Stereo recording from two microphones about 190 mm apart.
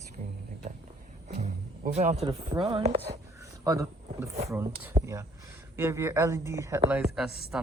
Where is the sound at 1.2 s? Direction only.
35° right (ahead or behind).